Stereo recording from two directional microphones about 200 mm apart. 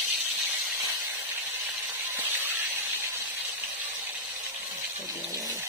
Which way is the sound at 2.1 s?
10° right (ahead or behind).